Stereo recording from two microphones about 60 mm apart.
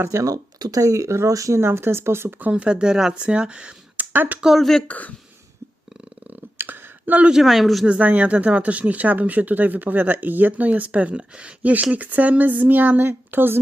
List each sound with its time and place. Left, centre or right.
0.1 s speech: right
1.5 s speech: right
2.4 s speech: right
3.9 s a sound: right
4.4 s speech: centre
4.9 s speech: left
6.6 s a sound: right
7.4 s speech: centre
7.9 s speech: right